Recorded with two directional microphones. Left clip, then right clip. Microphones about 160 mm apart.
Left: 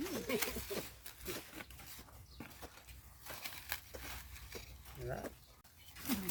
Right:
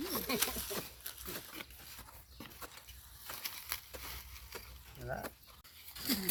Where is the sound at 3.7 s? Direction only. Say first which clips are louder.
Left 1 dB; centre (ahead or behind).